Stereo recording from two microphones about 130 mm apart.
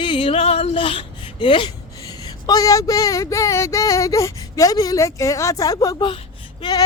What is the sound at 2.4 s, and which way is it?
Speech, 25° left (ahead or behind).